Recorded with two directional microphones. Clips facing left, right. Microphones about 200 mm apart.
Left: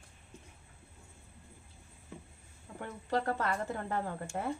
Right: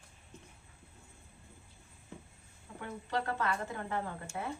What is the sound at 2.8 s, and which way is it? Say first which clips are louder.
Speech: left 3 dB; 40° left (ahead or behind).